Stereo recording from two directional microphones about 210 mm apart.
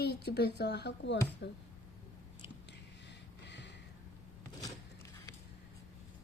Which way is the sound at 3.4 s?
55° left (ahead or behind).